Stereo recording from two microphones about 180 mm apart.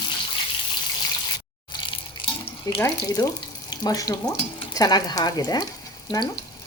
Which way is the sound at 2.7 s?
15° left (ahead or behind).